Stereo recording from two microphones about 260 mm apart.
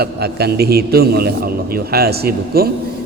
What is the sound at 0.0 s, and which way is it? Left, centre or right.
A man's voice, right.